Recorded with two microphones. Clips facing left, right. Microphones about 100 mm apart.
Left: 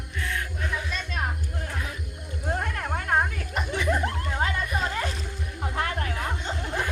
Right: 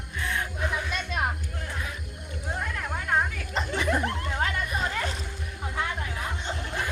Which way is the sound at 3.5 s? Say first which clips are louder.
Even; 10° left (ahead or behind).